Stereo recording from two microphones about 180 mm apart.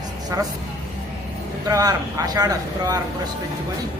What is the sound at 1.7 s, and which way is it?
Speech, 20° right (ahead or behind).